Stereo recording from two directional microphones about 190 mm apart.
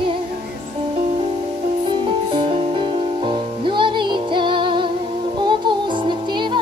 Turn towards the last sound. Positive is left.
turn(degrees=-25)  # may be behind; listen again after turning